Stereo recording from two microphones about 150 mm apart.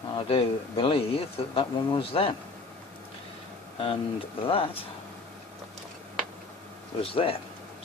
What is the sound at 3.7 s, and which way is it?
Speech, 40° left (ahead or behind).